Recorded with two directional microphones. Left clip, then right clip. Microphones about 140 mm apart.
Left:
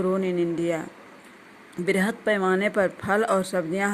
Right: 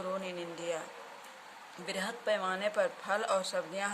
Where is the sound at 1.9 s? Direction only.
55° left (ahead or behind).